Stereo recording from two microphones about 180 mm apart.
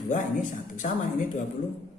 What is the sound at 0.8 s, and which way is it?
Speech, 45° left (ahead or behind).